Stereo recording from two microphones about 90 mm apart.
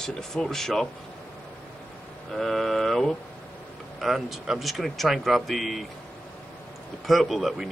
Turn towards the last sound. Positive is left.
turn(degrees=0)  # may be behind; listen again after turning